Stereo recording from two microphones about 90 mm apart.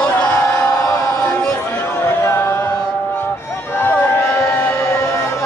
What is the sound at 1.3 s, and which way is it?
Music, 25° left (ahead or behind).